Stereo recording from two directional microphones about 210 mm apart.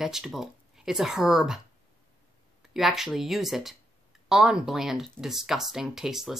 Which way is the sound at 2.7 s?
Centre (ahead or behind).